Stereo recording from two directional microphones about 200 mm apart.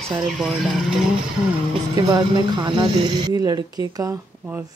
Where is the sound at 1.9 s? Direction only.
20° right (ahead or behind).